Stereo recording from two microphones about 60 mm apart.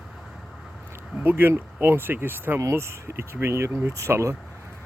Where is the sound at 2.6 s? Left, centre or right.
Right.